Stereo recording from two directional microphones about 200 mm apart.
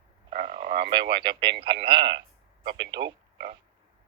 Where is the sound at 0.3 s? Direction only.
30° right (ahead or behind).